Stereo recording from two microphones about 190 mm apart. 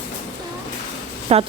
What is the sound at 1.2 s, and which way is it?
Speech, 30° right (ahead or behind).